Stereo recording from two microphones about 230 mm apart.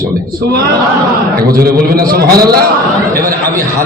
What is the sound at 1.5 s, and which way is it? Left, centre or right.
A man's voice, right.